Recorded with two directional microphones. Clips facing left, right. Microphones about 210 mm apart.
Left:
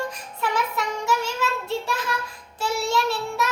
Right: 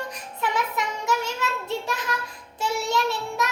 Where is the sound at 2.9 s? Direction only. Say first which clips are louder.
Left 1 dB; 20° right (ahead or behind).